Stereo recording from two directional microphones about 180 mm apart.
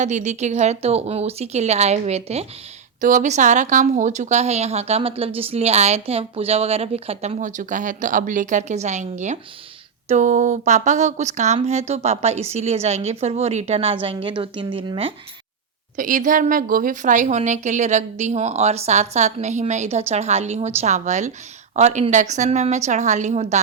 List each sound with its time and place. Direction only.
0.0 s a woman's voice: 40° right (ahead or behind)
16.0 s a woman's voice: 45° right (ahead or behind)